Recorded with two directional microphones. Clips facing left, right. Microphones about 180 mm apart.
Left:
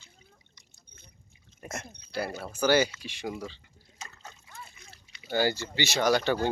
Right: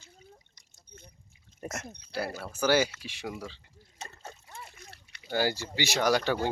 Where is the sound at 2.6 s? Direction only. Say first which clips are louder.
Left 1 dB; 5° right (ahead or behind).